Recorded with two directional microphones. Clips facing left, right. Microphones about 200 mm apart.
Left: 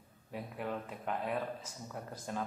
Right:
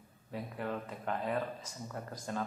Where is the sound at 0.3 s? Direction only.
5° left (ahead or behind).